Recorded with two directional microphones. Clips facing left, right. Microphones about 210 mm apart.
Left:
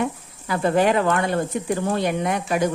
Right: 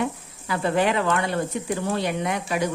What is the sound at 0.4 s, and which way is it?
A woman's voice, 45° left (ahead or behind).